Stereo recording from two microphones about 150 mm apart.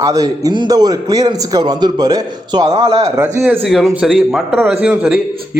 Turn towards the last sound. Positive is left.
turn(degrees=-5)  # may be behind; listen again after turning